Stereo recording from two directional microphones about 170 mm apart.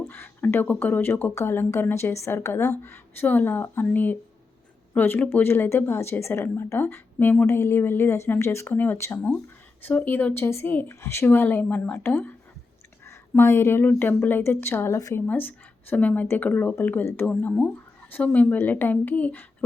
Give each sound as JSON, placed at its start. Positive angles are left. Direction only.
{"t": 0.0, "sound": "a woman's voice", "side_deg": 10}